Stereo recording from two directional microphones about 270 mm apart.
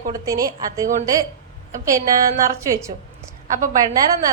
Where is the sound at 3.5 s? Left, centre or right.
Right.